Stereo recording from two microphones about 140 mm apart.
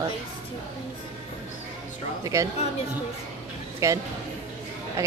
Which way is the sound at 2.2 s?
25° right (ahead or behind).